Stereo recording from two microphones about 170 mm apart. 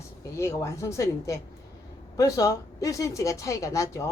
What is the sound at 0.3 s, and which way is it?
Speech, 15° left (ahead or behind).